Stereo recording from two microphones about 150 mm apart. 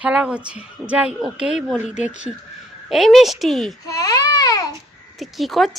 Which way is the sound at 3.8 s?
25° left (ahead or behind).